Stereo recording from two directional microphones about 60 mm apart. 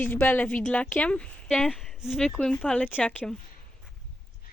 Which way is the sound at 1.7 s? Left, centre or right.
Centre.